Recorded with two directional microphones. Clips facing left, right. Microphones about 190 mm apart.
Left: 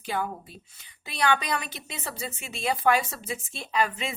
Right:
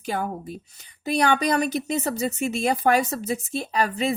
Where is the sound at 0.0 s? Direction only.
45° right (ahead or behind).